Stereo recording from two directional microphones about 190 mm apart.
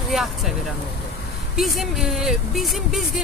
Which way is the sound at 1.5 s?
Centre (ahead or behind).